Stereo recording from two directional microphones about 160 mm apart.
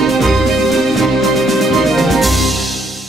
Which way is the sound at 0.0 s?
Centre (ahead or behind).